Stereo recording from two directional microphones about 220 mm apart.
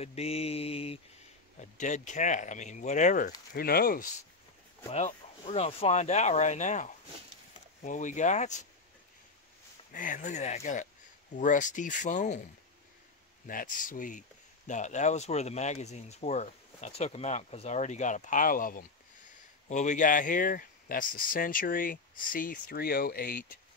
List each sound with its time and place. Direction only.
0.0 s mantra: 30° left (ahead or behind)
1.6 s speech: 35° left (ahead or behind)
4.9 s speech: 30° left (ahead or behind)
9.9 s speech: 35° left (ahead or behind)
13.5 s speech: 40° left (ahead or behind)